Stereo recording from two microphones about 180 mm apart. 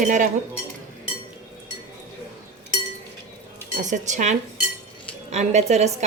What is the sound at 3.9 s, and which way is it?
Cutlery, 40° right (ahead or behind).